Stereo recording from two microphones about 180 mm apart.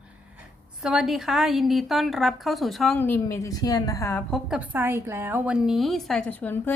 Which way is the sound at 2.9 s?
10° left (ahead or behind).